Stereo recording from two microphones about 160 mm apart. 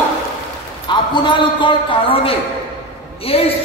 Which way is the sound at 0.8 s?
30° left (ahead or behind).